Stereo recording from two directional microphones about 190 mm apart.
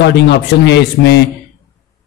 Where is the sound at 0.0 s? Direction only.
65° left (ahead or behind).